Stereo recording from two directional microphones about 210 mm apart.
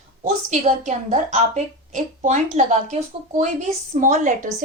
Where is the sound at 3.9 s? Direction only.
35° right (ahead or behind).